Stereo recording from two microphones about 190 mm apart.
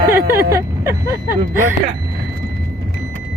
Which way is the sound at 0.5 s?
15° right (ahead or behind).